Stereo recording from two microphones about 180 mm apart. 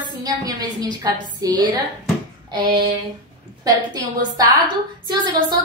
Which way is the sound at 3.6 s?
20° right (ahead or behind).